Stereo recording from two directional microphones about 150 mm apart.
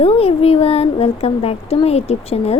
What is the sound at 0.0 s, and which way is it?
Speech, 40° left (ahead or behind).